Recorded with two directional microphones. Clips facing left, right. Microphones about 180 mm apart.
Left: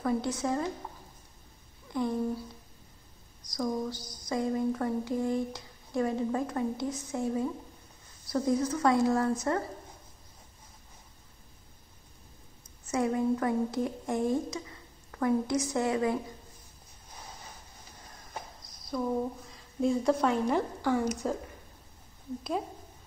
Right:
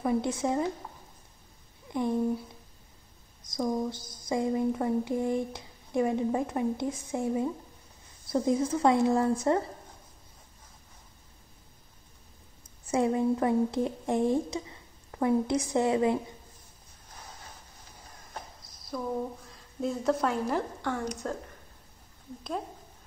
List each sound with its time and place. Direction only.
0.0 s speech: 20° right (ahead or behind)
1.9 s speech: 20° right (ahead or behind)
3.5 s speech: 25° right (ahead or behind)
12.8 s speech: 25° right (ahead or behind)
18.9 s a woman's voice: centre (ahead or behind)